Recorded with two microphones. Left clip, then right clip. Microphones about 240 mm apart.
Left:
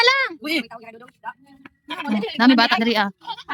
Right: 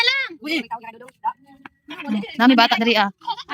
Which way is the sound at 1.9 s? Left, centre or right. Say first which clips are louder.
Left 4 dB; left.